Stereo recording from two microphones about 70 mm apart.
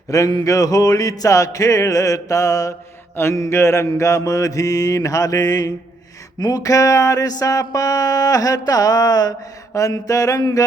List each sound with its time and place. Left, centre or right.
0.1 s mantra: left
6.4 s a sound: left
9.7 s mantra: left